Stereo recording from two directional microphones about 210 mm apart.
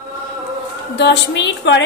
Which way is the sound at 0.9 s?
55° left (ahead or behind).